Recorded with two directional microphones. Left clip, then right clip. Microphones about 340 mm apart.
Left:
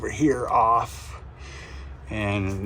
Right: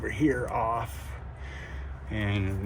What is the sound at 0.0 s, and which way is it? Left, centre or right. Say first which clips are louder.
Speech: left 4 dB; centre.